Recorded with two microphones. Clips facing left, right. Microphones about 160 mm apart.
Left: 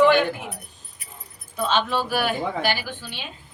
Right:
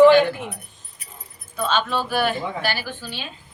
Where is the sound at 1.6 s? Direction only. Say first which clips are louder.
Even; 15° left (ahead or behind).